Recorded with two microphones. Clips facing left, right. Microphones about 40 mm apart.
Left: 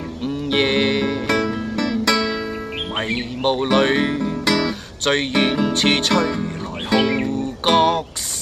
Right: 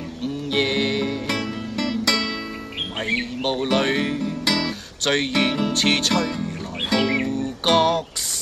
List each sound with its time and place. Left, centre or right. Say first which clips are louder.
0.5 s music: left 4 dB; left
3.0 s music: left 1 dB; left
3.7 s speech: left 4 dB; left
4.5 s guitar: left 4 dB; centre
5.7 s music: left 3 dB; left
7.7 s speech: left 2 dB; left